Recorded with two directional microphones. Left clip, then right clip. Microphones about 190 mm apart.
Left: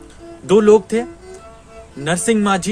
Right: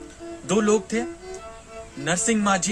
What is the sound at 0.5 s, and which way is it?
Speech, 55° left (ahead or behind).